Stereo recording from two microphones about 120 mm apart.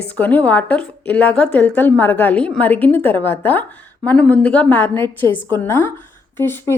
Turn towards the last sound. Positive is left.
turn(degrees=20)  # may be behind; listen again after turning